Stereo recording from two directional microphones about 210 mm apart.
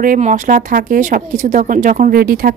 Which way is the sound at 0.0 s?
40° right (ahead or behind).